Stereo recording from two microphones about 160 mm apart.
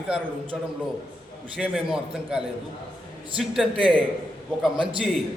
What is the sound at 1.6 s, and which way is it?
A man's voice, 5° right (ahead or behind).